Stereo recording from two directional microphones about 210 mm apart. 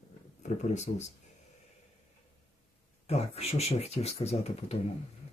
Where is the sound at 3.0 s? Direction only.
30° left (ahead or behind).